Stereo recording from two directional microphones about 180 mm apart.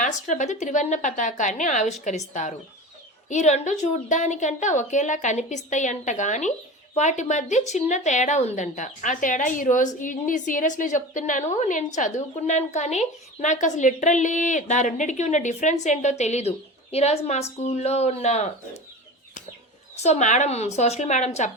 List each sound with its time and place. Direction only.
0.0 s a woman's voice: 45° left (ahead or behind)
20.0 s speech: 40° left (ahead or behind)